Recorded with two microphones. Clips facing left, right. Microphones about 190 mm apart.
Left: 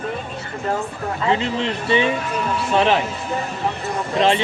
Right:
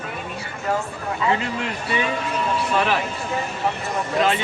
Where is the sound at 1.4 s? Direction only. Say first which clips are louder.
Left 4 dB; 25° left (ahead or behind).